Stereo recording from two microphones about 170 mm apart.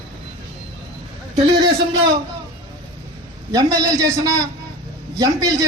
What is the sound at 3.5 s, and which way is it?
Speech, 20° right (ahead or behind).